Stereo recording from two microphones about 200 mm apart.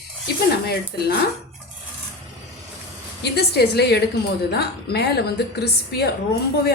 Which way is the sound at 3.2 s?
55° left (ahead or behind).